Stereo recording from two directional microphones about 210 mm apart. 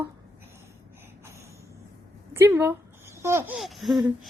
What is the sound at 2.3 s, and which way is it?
Babbling, 10° right (ahead or behind).